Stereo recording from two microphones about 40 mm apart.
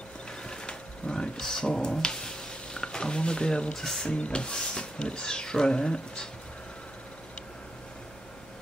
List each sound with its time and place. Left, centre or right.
0.4 s a sound: left
3.7 s speech: centre
4.0 s speech: left